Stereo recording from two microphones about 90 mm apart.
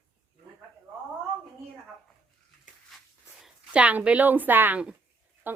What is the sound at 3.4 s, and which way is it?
Speech, 10° right (ahead or behind).